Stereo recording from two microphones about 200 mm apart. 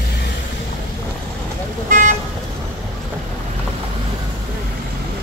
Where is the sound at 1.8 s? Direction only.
40° right (ahead or behind).